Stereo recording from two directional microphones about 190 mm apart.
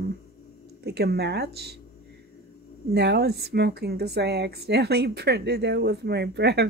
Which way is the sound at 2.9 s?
60° right (ahead or behind).